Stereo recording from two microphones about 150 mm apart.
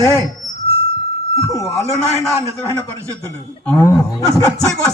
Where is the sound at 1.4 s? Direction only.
20° left (ahead or behind).